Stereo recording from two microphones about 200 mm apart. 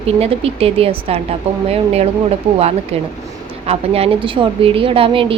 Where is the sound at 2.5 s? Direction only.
30° right (ahead or behind).